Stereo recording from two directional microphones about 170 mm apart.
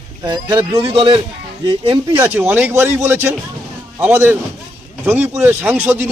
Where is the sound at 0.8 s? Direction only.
35° right (ahead or behind).